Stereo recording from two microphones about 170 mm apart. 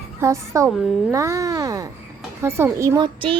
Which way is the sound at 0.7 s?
Centre (ahead or behind).